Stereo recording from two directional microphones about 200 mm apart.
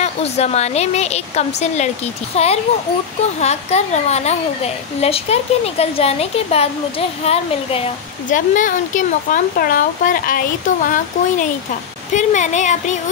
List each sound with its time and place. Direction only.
0.0 s speech: 30° left (ahead or behind)